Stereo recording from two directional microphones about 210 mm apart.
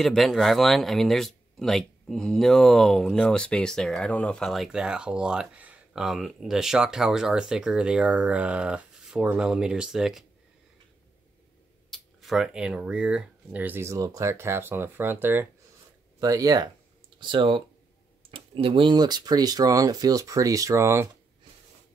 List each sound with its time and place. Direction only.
0.0 s speech: centre (ahead or behind)
11.9 s speech: centre (ahead or behind)